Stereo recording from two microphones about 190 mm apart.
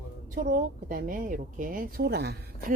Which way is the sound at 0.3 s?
45° right (ahead or behind).